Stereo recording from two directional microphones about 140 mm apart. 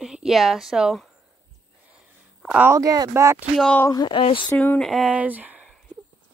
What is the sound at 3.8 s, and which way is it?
Speech, 30° left (ahead or behind).